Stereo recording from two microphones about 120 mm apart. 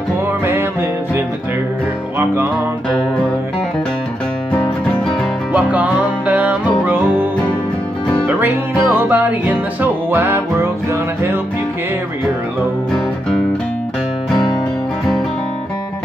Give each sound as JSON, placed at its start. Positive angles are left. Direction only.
{"t": 5.5, "sound": "music", "side_deg": -10}
{"t": 8.3, "sound": "music", "side_deg": -15}